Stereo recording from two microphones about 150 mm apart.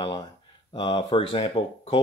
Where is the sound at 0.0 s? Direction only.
35° left (ahead or behind).